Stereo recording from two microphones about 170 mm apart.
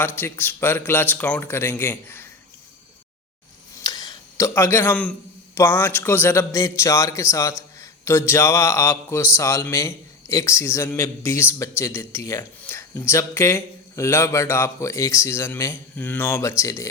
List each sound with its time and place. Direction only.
0.2 s speech: 10° left (ahead or behind)
3.8 s a sound: 25° left (ahead or behind)
5.5 s speech: 15° left (ahead or behind)